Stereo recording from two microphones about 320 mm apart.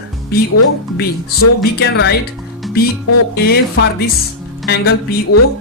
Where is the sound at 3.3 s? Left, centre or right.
Left.